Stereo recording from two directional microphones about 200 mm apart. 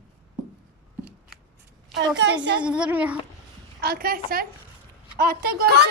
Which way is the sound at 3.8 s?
50° right (ahead or behind).